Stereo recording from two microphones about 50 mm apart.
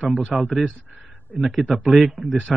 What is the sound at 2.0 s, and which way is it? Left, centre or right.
Speech, centre.